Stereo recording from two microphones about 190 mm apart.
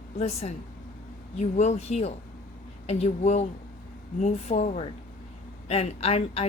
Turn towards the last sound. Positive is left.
turn(degrees=30)  # may be behind; listen again after turning